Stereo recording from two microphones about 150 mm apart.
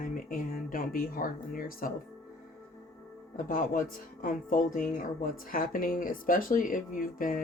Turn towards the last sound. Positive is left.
turn(degrees=70)  # may be behind; listen again after turning